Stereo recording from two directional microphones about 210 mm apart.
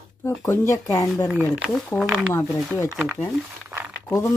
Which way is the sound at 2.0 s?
Centre (ahead or behind).